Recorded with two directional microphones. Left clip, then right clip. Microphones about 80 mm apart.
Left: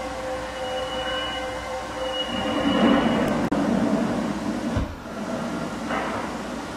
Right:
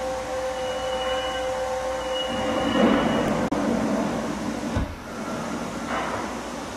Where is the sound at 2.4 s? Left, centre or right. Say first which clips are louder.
Left 1 dB; right.